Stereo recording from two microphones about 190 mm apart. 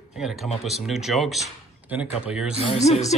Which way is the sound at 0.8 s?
Centre (ahead or behind).